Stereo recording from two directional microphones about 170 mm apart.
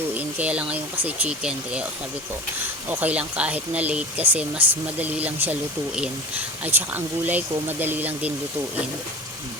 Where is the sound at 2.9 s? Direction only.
10° right (ahead or behind).